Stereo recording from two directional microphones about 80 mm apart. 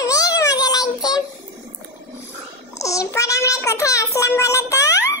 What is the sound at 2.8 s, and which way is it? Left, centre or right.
Child singing, left.